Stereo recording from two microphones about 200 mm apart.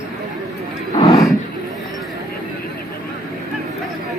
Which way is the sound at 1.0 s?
25° left (ahead or behind).